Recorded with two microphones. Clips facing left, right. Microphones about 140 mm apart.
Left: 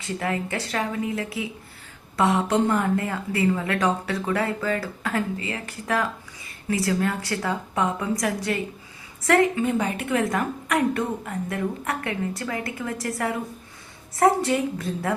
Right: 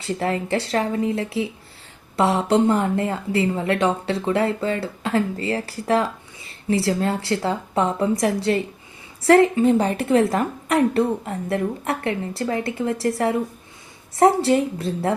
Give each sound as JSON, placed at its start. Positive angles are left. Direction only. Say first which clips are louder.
{"t": 0.0, "sound": "a woman's voice", "louder": "right 4 dB", "side_deg": -30}